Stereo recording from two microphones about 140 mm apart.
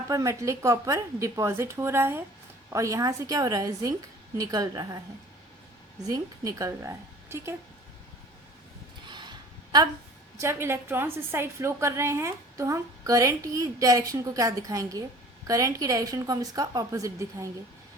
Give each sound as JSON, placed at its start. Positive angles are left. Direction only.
{"t": 0.1, "sound": "a woman's voice", "side_deg": -20}
{"t": 6.0, "sound": "a woman's voice", "side_deg": -25}
{"t": 9.0, "sound": "a sound", "side_deg": -30}
{"t": 10.3, "sound": "a woman's voice", "side_deg": -20}